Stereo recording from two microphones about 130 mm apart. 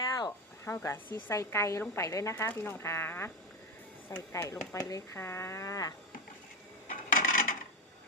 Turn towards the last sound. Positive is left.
turn(degrees=90)